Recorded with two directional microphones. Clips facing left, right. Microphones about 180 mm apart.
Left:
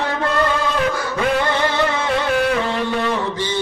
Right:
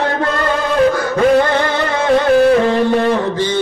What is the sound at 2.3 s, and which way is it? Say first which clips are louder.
Music: right 10 dB; 40° right (ahead or behind).